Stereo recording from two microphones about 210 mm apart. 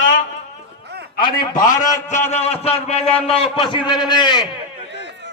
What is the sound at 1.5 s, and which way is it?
A man's voice, 40° left (ahead or behind).